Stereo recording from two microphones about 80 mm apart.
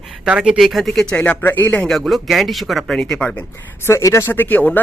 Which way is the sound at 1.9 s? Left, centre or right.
Centre.